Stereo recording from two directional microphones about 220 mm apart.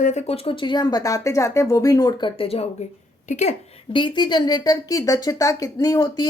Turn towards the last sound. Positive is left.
turn(degrees=20)  # may be behind; listen again after turning